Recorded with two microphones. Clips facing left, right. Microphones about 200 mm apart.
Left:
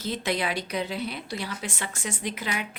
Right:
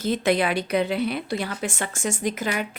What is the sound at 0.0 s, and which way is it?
A woman's voice, 55° right (ahead or behind).